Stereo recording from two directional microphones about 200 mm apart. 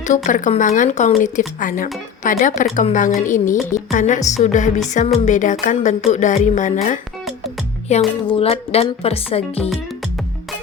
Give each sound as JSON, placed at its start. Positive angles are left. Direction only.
{"t": 0.1, "sound": "speech", "side_deg": 40}